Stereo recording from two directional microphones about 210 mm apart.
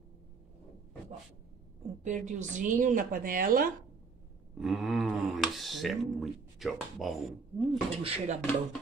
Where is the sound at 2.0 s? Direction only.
35° right (ahead or behind).